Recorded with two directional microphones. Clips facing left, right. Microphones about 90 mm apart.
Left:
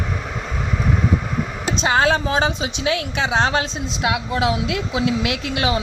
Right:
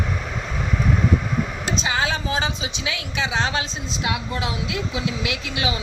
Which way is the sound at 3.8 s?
75° left (ahead or behind).